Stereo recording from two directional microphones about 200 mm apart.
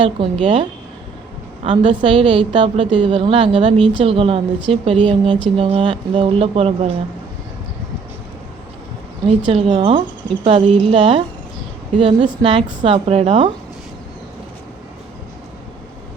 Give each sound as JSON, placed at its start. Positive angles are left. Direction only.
{"t": 0.0, "sound": "speech", "side_deg": -25}
{"t": 9.5, "sound": "speech", "side_deg": -30}